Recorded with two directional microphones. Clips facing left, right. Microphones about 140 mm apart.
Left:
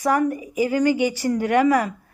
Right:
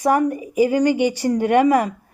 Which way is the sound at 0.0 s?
20° right (ahead or behind).